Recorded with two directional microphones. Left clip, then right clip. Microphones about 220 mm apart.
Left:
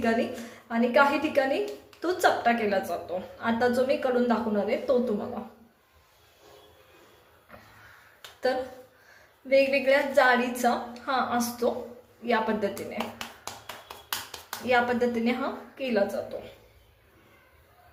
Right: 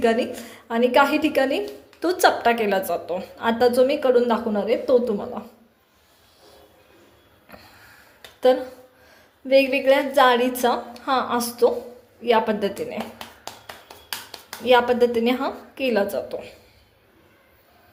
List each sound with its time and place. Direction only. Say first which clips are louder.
0.7 s a woman's voice: right 5 dB; 40° right (ahead or behind)
9.5 s a woman's voice: right 5 dB; 30° right (ahead or behind)
14.6 s a woman's voice: right 7 dB; 35° right (ahead or behind)